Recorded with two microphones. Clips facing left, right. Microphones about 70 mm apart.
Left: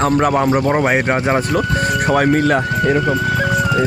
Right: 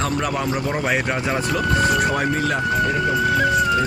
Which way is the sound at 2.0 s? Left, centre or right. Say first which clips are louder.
Left 6 dB; left.